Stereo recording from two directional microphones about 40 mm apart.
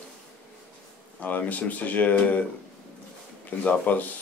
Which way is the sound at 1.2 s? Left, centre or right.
Left.